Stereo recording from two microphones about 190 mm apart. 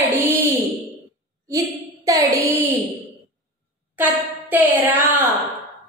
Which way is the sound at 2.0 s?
15° right (ahead or behind).